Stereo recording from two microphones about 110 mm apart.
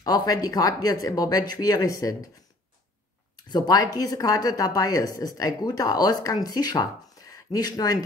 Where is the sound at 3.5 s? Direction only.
40° left (ahead or behind).